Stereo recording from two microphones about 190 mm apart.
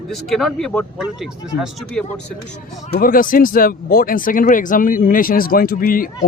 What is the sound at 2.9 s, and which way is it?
Speech, 50° left (ahead or behind).